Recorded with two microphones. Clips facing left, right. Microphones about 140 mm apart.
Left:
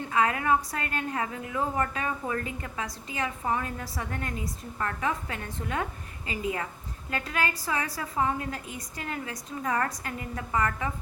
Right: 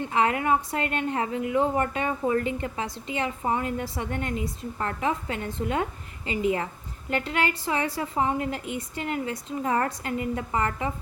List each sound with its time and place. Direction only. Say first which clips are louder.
0.1 s a woman's voice: right 1 dB; 25° right (ahead or behind)